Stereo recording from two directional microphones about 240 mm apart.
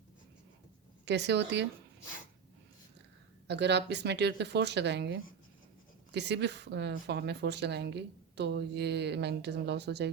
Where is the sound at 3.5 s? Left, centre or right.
Right.